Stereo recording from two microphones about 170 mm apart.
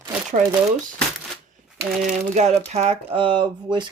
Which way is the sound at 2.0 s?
45° right (ahead or behind).